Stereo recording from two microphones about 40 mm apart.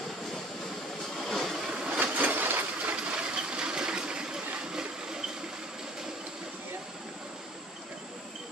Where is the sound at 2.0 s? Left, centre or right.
Right.